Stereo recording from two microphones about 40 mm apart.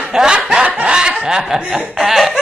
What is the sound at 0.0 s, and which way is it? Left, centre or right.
Snicker, centre.